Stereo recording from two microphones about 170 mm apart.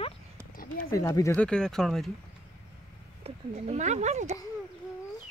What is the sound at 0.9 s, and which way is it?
Speech, 20° left (ahead or behind).